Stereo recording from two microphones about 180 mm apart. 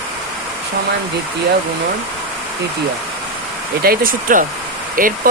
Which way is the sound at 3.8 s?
55° right (ahead or behind).